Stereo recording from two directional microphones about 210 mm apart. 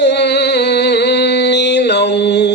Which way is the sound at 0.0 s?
55° left (ahead or behind).